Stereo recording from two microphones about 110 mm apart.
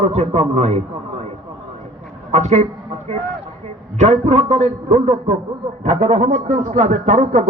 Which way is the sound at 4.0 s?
90° right.